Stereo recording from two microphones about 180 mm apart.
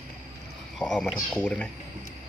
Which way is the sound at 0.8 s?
Centre (ahead or behind).